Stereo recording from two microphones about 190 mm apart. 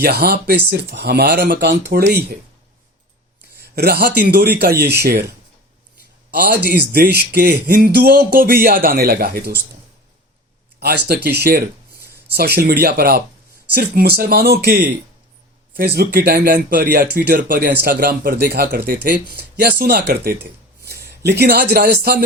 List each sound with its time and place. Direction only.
0.0 s speech: 55° right (ahead or behind)
3.8 s speech: 60° right (ahead or behind)
6.3 s speech: 55° right (ahead or behind)
10.8 s speech: 60° right (ahead or behind)